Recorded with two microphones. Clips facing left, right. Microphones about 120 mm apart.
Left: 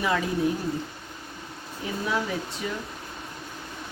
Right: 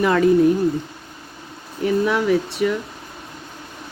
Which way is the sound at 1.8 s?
70° right (ahead or behind).